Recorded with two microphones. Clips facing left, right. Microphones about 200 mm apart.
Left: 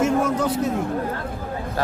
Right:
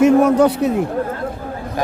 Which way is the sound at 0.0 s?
65° right (ahead or behind).